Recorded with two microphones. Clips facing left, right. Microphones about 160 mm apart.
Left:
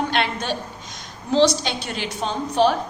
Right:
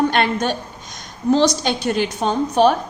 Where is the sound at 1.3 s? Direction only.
50° right (ahead or behind).